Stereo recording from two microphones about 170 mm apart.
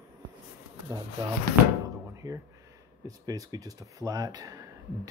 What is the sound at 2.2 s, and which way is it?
Speech, 20° right (ahead or behind).